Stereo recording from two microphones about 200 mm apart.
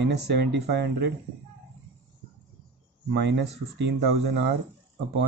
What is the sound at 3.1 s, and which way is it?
Speech, 60° right (ahead or behind).